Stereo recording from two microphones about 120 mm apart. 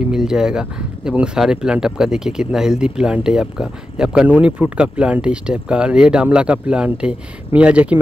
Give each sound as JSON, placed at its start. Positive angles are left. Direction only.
{"t": 0.1, "sound": "speech", "side_deg": -5}